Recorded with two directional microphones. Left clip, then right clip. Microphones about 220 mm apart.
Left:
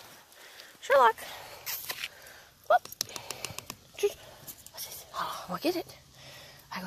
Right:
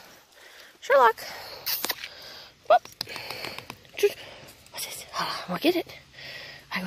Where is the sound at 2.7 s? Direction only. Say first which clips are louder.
Right 5 dB; 55° right (ahead or behind).